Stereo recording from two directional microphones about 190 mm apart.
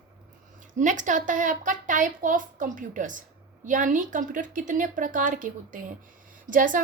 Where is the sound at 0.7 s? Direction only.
40° right (ahead or behind).